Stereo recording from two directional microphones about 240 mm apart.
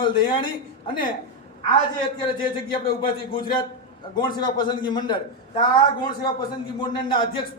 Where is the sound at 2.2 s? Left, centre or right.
Left.